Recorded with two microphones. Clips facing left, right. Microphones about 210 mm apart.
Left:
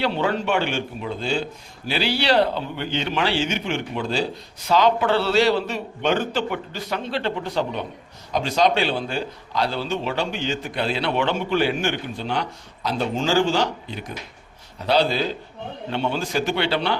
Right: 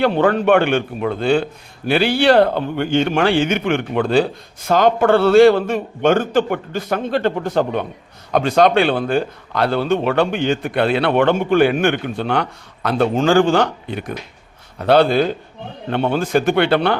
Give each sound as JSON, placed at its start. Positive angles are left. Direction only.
{"t": 0.0, "sound": "a man's voice", "side_deg": -50}